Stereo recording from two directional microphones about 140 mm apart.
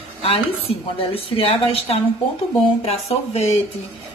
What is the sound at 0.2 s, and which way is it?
Speech, 45° left (ahead or behind).